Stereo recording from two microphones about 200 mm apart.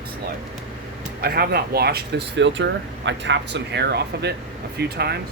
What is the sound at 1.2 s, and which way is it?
Speech, 50° right (ahead or behind).